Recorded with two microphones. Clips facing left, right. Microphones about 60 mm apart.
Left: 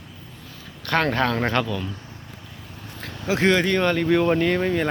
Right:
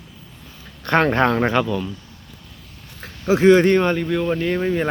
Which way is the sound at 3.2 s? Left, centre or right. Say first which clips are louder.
Right 7 dB; right.